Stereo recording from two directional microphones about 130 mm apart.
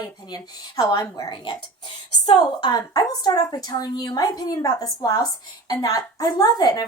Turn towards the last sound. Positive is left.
turn(degrees=30)  # may be behind; listen again after turning